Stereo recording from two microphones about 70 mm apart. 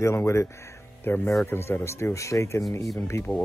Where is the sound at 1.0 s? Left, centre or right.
Left.